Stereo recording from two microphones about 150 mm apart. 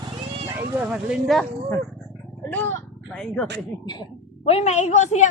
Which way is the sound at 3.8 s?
30° left (ahead or behind).